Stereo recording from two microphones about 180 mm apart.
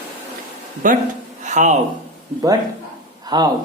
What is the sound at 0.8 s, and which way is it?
Speech, 45° right (ahead or behind).